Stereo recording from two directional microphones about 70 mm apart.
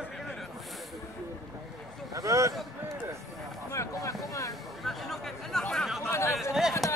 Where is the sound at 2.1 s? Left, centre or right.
Right.